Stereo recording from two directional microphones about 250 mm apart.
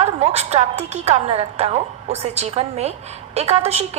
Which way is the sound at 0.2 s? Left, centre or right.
Right.